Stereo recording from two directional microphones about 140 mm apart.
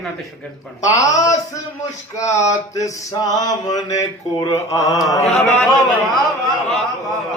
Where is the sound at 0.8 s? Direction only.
25° left (ahead or behind).